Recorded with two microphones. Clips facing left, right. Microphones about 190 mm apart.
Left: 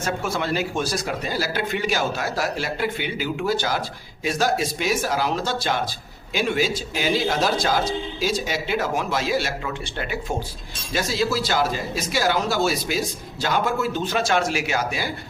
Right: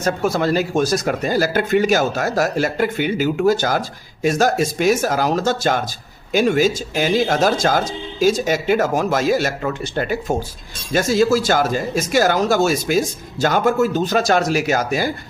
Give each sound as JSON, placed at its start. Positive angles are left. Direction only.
{"t": 0.0, "sound": "speech", "side_deg": -40}